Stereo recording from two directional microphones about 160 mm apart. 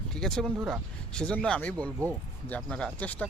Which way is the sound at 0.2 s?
5° left (ahead or behind).